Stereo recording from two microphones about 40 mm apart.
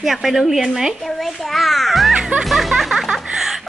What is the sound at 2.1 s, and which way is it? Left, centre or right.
Music, centre.